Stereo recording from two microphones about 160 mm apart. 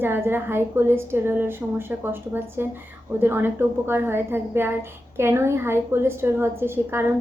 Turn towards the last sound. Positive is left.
turn(degrees=-15)  # may be behind; listen again after turning